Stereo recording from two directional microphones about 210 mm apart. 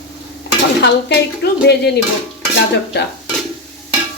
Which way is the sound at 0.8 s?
50° left (ahead or behind).